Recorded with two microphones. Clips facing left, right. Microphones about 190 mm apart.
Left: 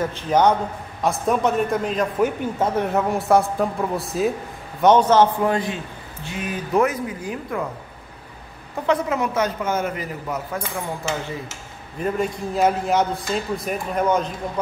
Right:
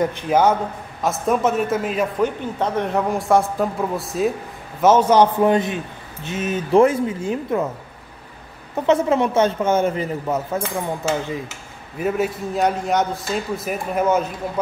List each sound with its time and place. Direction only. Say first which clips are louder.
0.0 s a man's voice: right 1 dB; 10° right (ahead or behind)
2.1 s a man's voice: even; 10° left (ahead or behind); by 7.6 s 25° right (ahead or behind)
8.8 s a man's voice: right 4 dB; 25° right (ahead or behind)
12.0 s a man's voice: right 2 dB; centre (ahead or behind)